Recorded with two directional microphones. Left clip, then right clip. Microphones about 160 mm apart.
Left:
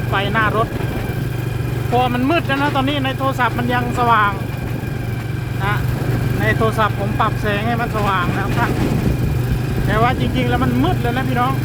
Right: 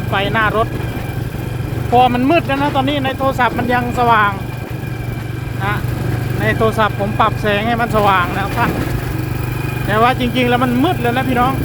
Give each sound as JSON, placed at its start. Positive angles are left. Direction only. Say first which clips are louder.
{"t": 0.1, "sound": "speech", "louder": "right 2 dB", "side_deg": -10}
{"t": 2.0, "sound": "speech", "louder": "right 5 dB", "side_deg": -25}
{"t": 6.4, "sound": "speech", "louder": "right 3 dB", "side_deg": -5}
{"t": 9.9, "sound": "speech", "louder": "right 4 dB", "side_deg": -10}